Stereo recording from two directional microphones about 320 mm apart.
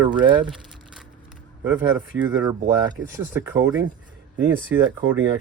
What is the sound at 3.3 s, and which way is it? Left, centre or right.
Speech, centre.